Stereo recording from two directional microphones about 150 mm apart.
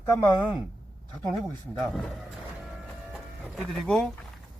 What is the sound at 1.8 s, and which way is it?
Speech, centre (ahead or behind).